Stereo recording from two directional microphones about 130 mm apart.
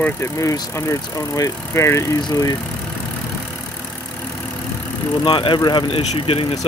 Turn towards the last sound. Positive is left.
turn(degrees=45)  # may be behind; listen again after turning